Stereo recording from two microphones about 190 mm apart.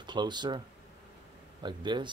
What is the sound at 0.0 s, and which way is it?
Speech, 25° right (ahead or behind).